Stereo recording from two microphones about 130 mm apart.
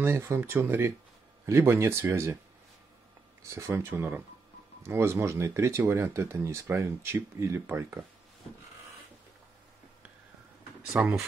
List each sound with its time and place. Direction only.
0.0 s speech: 20° right (ahead or behind)
3.4 s speech: 20° right (ahead or behind)
10.9 s speech: 5° right (ahead or behind)